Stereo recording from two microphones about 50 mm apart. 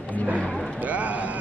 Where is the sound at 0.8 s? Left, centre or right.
Right.